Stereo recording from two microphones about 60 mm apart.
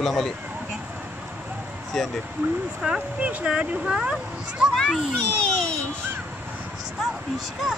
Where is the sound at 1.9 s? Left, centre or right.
Centre.